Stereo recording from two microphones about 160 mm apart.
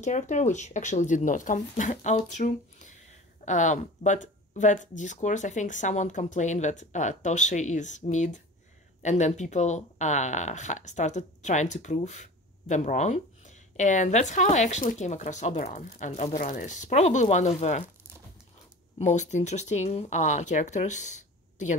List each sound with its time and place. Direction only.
0.0 s speech: 50° left (ahead or behind)
18.9 s speech: 45° left (ahead or behind)